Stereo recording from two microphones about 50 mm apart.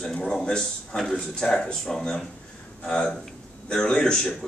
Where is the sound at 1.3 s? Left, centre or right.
Centre.